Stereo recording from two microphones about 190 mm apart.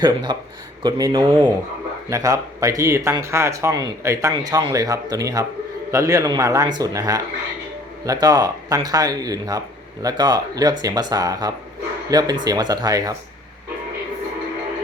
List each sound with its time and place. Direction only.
0.0 s speech: 20° right (ahead or behind)